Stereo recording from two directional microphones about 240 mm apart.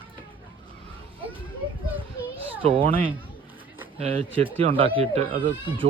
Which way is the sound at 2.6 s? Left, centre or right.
Right.